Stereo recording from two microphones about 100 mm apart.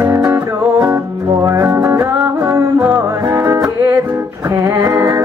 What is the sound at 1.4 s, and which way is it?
Music, 35° right (ahead or behind).